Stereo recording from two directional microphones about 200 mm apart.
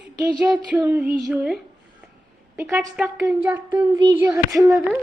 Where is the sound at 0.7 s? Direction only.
10° right (ahead or behind).